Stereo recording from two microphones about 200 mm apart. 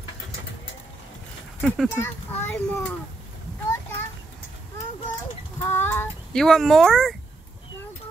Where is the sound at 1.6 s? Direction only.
5° left (ahead or behind).